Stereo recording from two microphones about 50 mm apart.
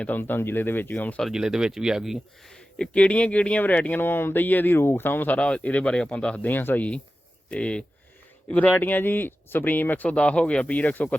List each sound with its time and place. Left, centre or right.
0.2 s speech: left
1.3 s speech: centre
2.5 s a sound: centre
2.9 s speech: left
4.0 s speech: left
4.8 s speech: left
5.4 s speech: left
6.5 s speech: left
7.5 s speech: left
8.4 s speech: left
10.1 s speech: left